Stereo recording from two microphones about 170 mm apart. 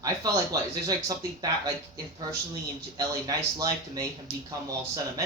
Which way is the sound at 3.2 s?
20° right (ahead or behind).